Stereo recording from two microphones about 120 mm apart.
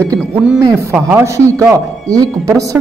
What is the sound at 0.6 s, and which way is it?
A man's voice, 25° right (ahead or behind).